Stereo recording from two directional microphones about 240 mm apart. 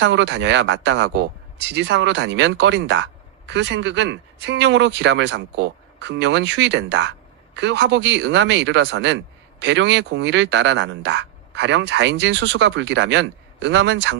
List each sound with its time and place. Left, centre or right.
0.0 s speech: right